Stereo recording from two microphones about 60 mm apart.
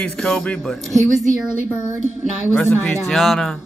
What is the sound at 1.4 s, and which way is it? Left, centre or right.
Speech, left.